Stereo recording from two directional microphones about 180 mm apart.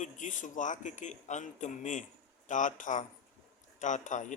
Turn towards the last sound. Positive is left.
turn(degrees=45)  # may be behind; listen again after turning